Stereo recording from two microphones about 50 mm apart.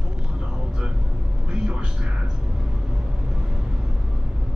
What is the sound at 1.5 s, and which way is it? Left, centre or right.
Music, centre.